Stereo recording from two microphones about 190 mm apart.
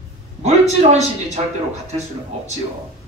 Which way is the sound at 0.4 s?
35° right (ahead or behind).